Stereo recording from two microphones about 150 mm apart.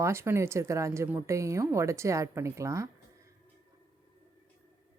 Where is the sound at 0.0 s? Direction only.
15° right (ahead or behind).